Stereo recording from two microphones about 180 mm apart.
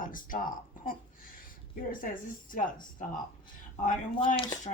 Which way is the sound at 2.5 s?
50° left (ahead or behind).